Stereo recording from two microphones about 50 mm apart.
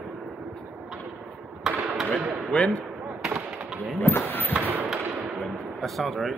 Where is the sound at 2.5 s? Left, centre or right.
Left.